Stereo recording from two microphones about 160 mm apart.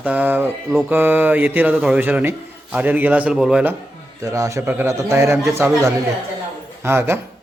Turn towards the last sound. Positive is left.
turn(degrees=-15)  # may be behind; listen again after turning